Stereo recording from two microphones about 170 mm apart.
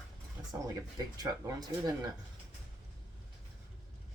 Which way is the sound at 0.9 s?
20° right (ahead or behind).